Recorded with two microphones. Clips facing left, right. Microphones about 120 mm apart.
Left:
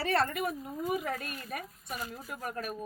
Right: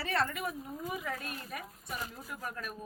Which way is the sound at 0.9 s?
50° left (ahead or behind).